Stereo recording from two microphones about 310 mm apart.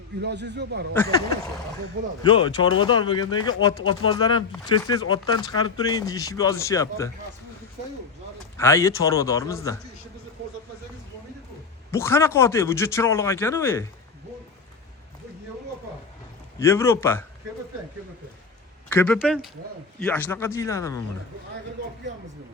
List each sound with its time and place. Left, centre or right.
0.2 s a man's voice: right
2.2 s speech: centre
8.5 s speech: centre
11.9 s speech: centre
16.6 s speech: centre
18.9 s speech: centre